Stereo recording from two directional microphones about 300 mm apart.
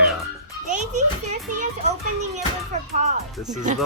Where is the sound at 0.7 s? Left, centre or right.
Right.